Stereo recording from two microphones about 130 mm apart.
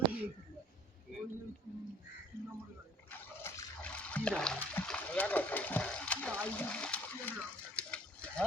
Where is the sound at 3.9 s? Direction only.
10° left (ahead or behind).